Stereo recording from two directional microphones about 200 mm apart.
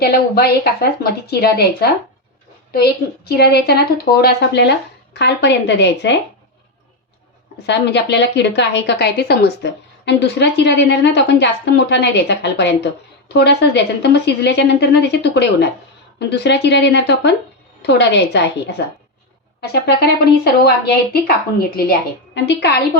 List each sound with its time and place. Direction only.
0.0 s a woman's voice: 50° left (ahead or behind)
7.7 s a woman's voice: 60° left (ahead or behind)
22.4 s a woman's voice: 60° left (ahead or behind)